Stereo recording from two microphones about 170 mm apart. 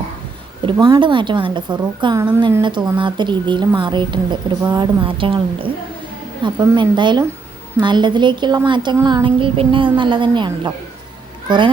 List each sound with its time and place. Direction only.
0.6 s a woman's voice: 25° right (ahead or behind)